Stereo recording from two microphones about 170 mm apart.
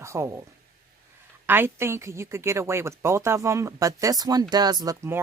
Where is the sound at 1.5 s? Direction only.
15° right (ahead or behind).